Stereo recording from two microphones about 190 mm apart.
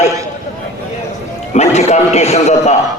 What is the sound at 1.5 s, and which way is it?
A man's voice, 35° left (ahead or behind).